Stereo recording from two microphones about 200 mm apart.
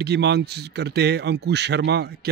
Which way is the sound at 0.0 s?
55° right (ahead or behind).